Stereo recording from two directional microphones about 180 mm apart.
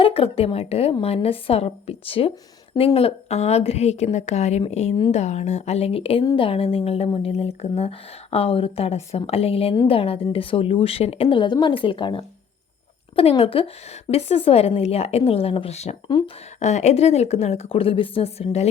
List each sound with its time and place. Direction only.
0.0 s a woman's voice: 30° left (ahead or behind)
4.9 s a woman's voice: 25° left (ahead or behind)
5.2 s a woman's voice: 40° left (ahead or behind)
16.0 s a woman's voice: 25° left (ahead or behind)
16.6 s a woman's voice: 40° left (ahead or behind)